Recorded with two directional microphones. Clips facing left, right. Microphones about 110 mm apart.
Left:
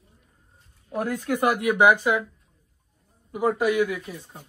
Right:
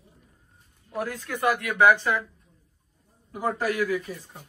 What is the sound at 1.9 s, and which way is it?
Speech, 5° left (ahead or behind).